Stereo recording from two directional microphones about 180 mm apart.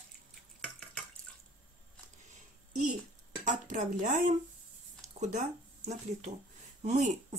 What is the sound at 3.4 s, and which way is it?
Speech, 45° right (ahead or behind).